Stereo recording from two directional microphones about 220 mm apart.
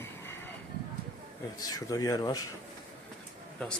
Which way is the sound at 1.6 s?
15° left (ahead or behind).